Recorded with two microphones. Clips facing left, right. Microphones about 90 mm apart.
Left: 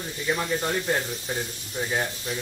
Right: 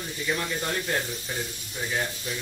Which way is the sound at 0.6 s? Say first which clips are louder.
Left 3 dB; 25° left (ahead or behind).